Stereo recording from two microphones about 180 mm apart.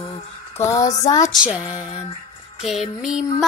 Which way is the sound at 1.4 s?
5° right (ahead or behind).